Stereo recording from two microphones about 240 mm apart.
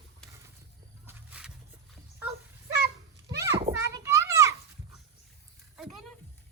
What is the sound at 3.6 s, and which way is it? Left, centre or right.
Children playing, centre.